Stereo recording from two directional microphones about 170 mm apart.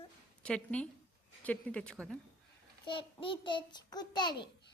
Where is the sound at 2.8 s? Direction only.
30° left (ahead or behind).